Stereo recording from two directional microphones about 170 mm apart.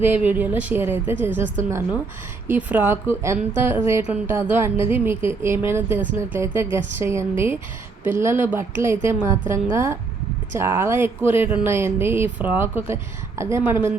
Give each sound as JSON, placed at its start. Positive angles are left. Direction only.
{"t": 0.0, "sound": "a woman's voice", "side_deg": -10}
{"t": 2.5, "sound": "a woman's voice", "side_deg": -10}